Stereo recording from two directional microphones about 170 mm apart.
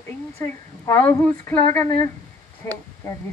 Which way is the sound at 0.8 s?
15° left (ahead or behind).